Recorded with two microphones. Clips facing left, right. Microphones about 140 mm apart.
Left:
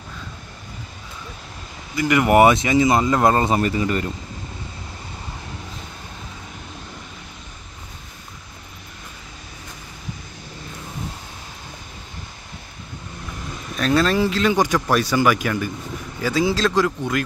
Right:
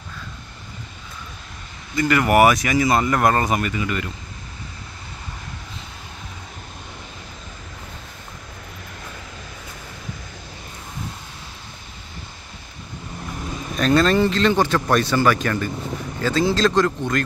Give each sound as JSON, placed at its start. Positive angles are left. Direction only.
{"t": 2.0, "sound": "speech", "side_deg": 20}
{"t": 13.7, "sound": "speech", "side_deg": 0}